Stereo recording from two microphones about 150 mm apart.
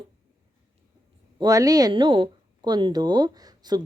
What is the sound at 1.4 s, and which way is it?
Speech, 25° right (ahead or behind).